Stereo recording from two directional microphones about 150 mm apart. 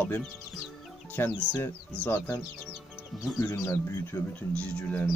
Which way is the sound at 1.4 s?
10° left (ahead or behind).